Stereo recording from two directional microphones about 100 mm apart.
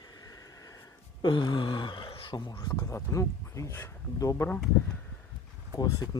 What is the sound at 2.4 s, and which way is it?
Speech, 45° left (ahead or behind).